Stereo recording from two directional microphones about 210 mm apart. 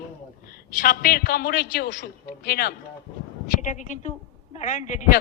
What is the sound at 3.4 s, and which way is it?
A woman's voice, 35° left (ahead or behind).